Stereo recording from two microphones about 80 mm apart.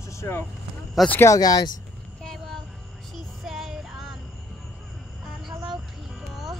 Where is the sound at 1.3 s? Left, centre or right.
Left.